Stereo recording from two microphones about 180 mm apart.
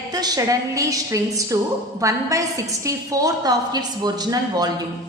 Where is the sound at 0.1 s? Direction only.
20° right (ahead or behind).